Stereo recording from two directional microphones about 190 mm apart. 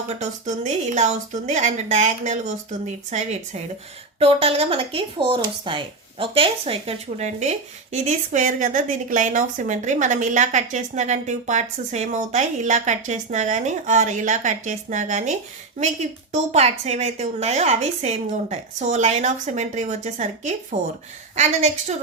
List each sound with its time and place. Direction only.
0.1 s a woman's voice: 40° right (ahead or behind)